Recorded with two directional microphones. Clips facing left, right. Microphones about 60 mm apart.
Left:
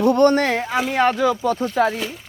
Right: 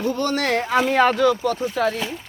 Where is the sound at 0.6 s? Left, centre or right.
Centre.